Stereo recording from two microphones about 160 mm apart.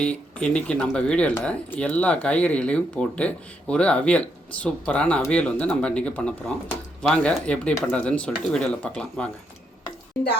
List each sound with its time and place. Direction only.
0.0 s speech: 5° left (ahead or behind)